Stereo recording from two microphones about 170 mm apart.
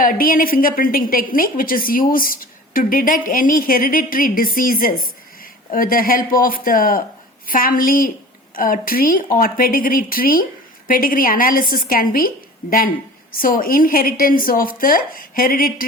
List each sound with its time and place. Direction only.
0.0 s a woman's voice: 55° left (ahead or behind)
13.4 s a woman's voice: 55° left (ahead or behind)